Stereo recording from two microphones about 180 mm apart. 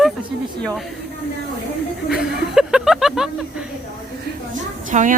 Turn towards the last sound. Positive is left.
turn(degrees=-45)  # may be behind; listen again after turning